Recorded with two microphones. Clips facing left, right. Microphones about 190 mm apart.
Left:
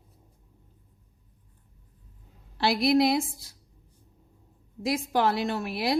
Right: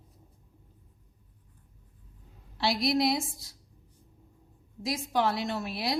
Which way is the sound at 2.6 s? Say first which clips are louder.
Left 4 dB; 60° left (ahead or behind).